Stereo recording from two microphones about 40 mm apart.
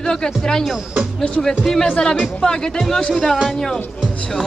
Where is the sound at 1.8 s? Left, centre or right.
Left.